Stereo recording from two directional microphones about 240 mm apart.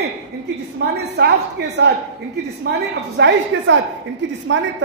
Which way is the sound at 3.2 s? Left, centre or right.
Right.